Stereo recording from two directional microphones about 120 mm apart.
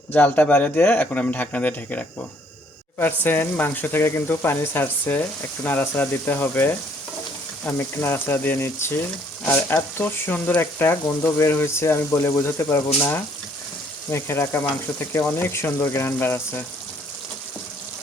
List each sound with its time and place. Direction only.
0.1 s speech: 15° left (ahead or behind)
7.6 s frying: 20° left (ahead or behind)